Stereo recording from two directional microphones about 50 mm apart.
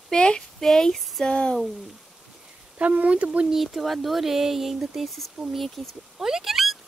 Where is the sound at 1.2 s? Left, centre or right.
Centre.